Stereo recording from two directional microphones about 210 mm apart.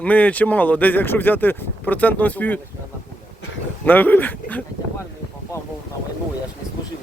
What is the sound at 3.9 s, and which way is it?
Speech, 10° left (ahead or behind).